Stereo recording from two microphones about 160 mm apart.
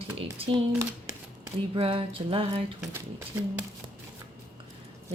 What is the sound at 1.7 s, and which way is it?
Speech, 35° right (ahead or behind).